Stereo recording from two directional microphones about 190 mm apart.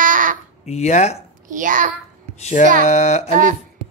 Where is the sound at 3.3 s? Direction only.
45° right (ahead or behind).